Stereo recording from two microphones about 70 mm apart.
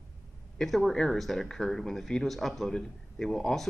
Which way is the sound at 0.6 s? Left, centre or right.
Centre.